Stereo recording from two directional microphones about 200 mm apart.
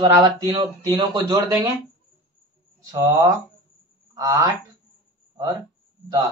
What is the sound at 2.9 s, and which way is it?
Speech, 15° right (ahead or behind).